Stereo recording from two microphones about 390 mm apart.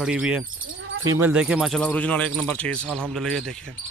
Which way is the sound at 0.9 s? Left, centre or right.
Right.